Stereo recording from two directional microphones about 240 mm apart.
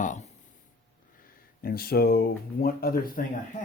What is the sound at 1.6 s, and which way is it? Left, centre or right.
Speech, left.